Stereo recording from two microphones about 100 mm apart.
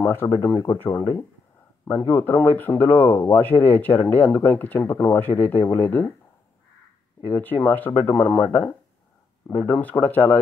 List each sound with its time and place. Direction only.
0.0 s speech: 20° left (ahead or behind)
7.2 s speech: 20° left (ahead or behind)